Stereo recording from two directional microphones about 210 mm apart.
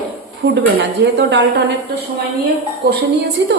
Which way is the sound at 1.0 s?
55° right (ahead or behind).